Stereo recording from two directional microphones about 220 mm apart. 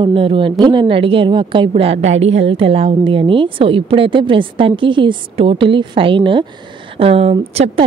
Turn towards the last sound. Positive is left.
turn(degrees=-25)  # may be behind; listen again after turning